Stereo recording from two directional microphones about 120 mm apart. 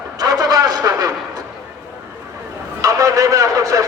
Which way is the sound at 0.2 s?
30° right (ahead or behind).